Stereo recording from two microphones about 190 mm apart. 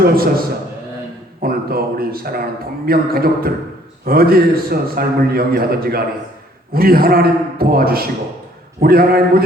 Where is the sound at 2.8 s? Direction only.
50° right (ahead or behind).